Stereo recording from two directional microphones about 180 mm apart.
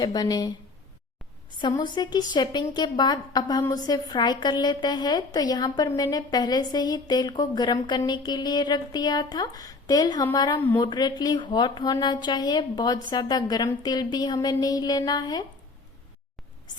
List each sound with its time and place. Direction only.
0.0 s a woman's voice: 20° left (ahead or behind)